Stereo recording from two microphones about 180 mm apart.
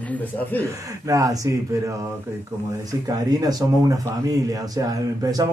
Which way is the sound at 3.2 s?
20° right (ahead or behind).